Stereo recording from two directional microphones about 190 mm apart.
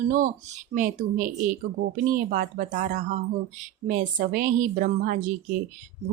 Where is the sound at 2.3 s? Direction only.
45° right (ahead or behind).